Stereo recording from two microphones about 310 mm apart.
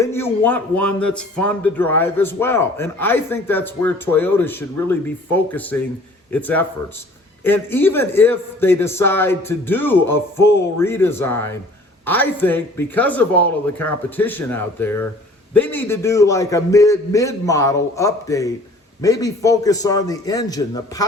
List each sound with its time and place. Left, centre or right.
0.0 s a man's voice: centre